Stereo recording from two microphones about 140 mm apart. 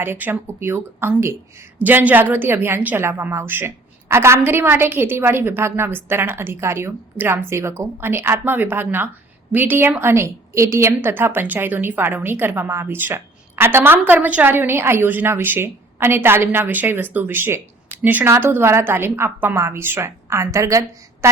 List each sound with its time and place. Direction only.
0.0 s a woman's voice: 15° right (ahead or behind)